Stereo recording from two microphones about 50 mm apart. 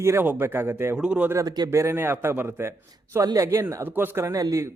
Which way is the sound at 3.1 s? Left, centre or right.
Right.